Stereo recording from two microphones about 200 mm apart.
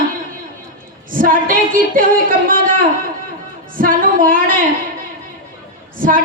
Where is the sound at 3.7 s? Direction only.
45° right (ahead or behind).